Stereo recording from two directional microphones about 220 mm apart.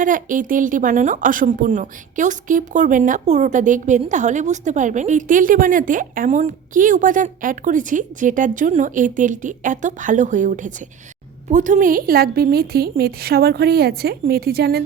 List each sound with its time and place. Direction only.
0.0 s a woman's voice: 35° right (ahead or behind)